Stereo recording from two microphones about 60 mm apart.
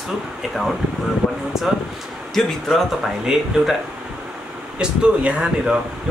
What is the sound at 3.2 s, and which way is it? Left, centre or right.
Speech, centre.